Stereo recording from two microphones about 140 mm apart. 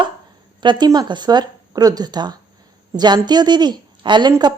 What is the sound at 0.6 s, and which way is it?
A woman's voice, 30° right (ahead or behind).